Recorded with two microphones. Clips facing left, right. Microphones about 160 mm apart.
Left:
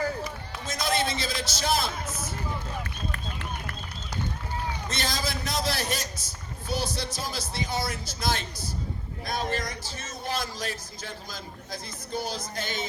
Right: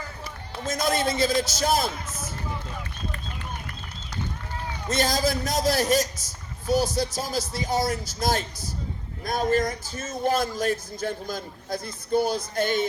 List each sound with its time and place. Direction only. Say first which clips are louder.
0.6 s speech: right 4 dB; 45° right (ahead or behind)
3.1 s run: even; 65° left (ahead or behind)
4.9 s speech: right 11 dB; 45° right (ahead or behind)